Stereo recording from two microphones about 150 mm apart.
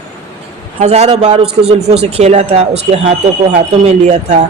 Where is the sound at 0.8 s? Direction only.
45° right (ahead or behind).